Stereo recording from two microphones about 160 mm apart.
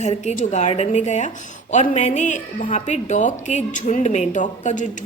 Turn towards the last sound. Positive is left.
turn(degrees=50)  # may be behind; listen again after turning